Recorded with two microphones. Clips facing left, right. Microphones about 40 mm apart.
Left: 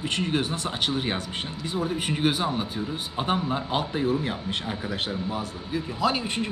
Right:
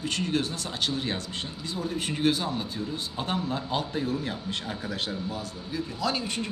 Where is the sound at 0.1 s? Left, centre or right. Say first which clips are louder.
Left 2 dB; left.